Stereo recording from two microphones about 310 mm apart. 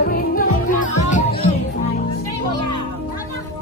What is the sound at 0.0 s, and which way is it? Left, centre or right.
Music, left.